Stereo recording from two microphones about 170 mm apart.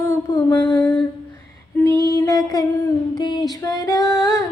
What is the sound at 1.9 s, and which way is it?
Child singing, 20° left (ahead or behind).